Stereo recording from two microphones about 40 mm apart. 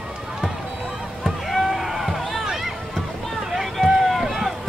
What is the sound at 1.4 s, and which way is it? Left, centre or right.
Rowboat, centre.